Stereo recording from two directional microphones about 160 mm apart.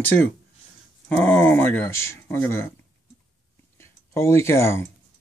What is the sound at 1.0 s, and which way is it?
Speech, 5° left (ahead or behind).